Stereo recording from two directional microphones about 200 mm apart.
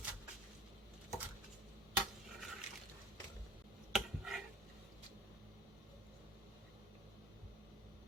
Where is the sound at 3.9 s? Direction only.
Centre (ahead or behind).